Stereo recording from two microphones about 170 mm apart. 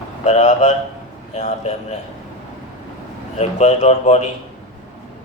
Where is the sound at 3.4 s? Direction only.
40° left (ahead or behind).